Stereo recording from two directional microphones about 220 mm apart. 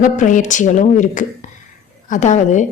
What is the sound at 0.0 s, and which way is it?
A woman's voice, 35° left (ahead or behind).